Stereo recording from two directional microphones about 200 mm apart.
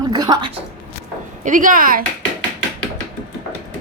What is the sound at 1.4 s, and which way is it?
Speech, 40° right (ahead or behind).